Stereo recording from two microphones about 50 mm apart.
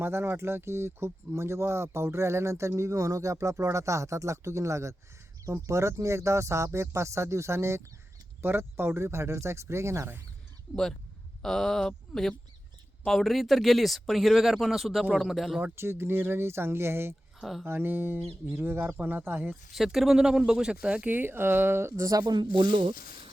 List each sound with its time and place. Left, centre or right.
0.0 s speech: right
8.4 s speech: right
11.4 s speech: centre
15.6 s speech: right
19.7 s speech: centre
21.1 s speech: right